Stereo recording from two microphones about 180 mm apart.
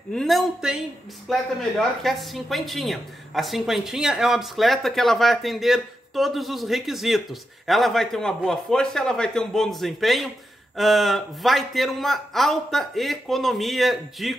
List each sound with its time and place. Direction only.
0.1 s speech: centre (ahead or behind)